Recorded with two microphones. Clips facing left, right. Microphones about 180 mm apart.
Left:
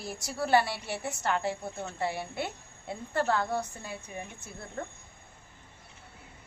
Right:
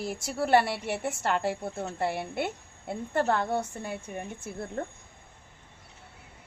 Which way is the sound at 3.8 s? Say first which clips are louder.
Right 5 dB; 55° right (ahead or behind).